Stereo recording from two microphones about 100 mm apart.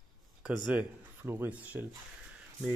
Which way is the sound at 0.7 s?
20° right (ahead or behind).